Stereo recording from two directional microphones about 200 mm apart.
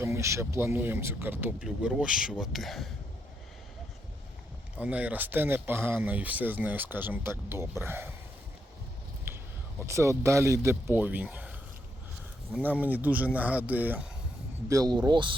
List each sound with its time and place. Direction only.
0.0 s speech: 15° right (ahead or behind)
4.8 s speech: 5° right (ahead or behind)
9.3 s a sound: 10° right (ahead or behind)
9.8 s speech: 15° right (ahead or behind)
12.5 s speech: 5° right (ahead or behind)
14.7 s speech: 20° right (ahead or behind)